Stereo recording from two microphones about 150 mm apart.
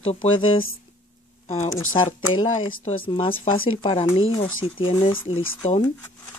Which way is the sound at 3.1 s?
35° left (ahead or behind).